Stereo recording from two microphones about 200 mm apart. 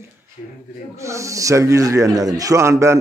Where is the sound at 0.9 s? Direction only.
15° right (ahead or behind).